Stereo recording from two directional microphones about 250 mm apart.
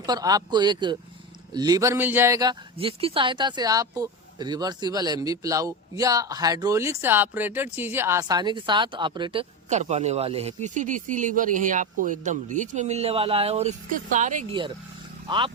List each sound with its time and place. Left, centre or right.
0.0 s speech: centre; by 14.4 s right
15.3 s speech: centre